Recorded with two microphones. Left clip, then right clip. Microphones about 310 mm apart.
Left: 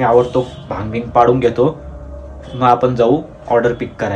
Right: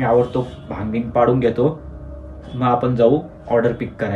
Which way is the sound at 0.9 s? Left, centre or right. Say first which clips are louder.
Left 5 dB; centre.